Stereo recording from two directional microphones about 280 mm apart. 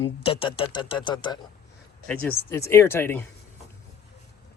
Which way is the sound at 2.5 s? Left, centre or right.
Centre.